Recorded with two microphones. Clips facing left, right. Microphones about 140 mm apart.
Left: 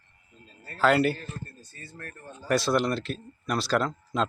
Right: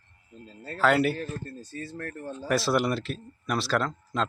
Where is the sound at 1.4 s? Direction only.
90° right.